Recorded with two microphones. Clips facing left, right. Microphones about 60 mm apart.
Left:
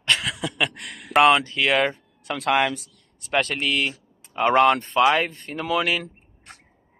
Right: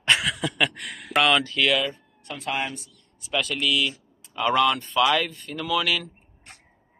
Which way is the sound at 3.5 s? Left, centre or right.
Left.